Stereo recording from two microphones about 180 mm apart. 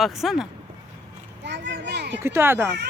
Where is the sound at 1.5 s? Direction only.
75° right (ahead or behind).